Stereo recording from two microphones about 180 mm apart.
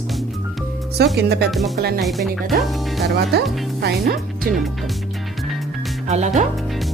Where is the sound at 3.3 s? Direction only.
65° right (ahead or behind).